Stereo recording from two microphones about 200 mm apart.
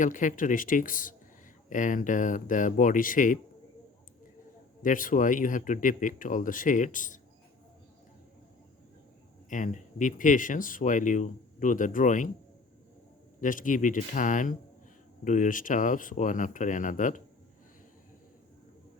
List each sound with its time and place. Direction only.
0.0 s speech: 40° left (ahead or behind)
4.8 s speech: 40° left (ahead or behind)
9.5 s speech: 40° left (ahead or behind)
13.4 s speech: 40° left (ahead or behind)